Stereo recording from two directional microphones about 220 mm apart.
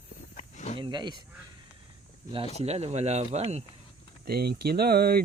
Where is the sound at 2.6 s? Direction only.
30° right (ahead or behind).